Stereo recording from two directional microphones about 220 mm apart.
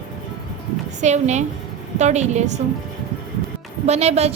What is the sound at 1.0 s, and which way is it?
A woman's voice, 30° right (ahead or behind).